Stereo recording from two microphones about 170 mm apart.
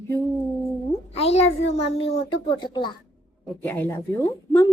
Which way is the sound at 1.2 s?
35° left (ahead or behind).